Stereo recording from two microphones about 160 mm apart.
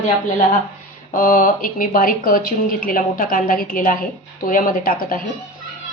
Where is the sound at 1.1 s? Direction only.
60° left (ahead or behind).